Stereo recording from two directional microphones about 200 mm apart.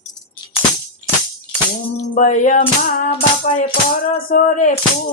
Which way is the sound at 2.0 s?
40° left (ahead or behind).